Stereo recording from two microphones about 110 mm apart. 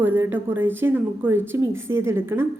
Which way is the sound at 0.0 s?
20° right (ahead or behind).